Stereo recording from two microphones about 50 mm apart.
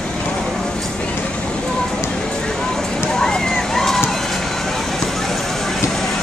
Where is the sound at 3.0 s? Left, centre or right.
Centre.